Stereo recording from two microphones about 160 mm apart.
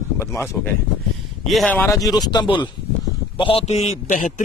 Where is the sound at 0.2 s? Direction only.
15° left (ahead or behind).